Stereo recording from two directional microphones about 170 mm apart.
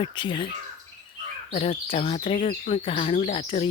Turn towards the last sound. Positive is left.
turn(degrees=30)  # may be behind; listen again after turning